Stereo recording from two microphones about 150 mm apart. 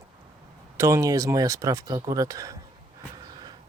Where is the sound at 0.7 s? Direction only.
20° right (ahead or behind).